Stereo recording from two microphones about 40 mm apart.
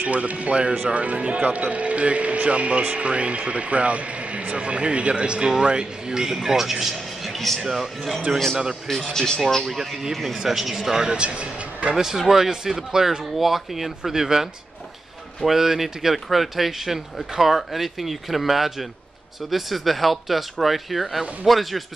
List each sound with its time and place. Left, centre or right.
0.0 s a man's voice: right; by 8.2 s centre
9.1 s speech: centre
10.1 s a man's voice: centre
11.1 s speech: right
11.9 s a man's voice: centre
13.2 s speech: centre